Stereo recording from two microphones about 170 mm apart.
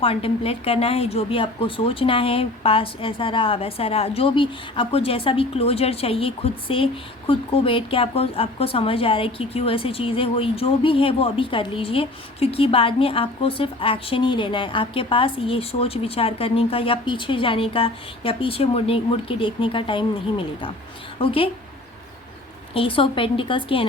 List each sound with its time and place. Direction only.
0.0 s a woman's voice: 35° left (ahead or behind)
22.7 s a woman's voice: 30° left (ahead or behind)